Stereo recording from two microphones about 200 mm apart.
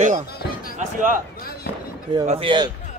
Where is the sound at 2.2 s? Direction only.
30° right (ahead or behind).